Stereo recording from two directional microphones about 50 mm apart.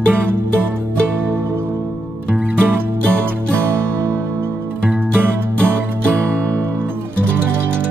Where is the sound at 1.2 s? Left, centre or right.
Right.